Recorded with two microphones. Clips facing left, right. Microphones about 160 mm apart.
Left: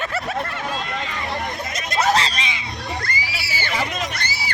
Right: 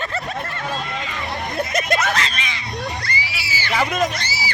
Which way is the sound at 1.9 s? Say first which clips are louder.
Left 3 dB; 30° left (ahead or behind).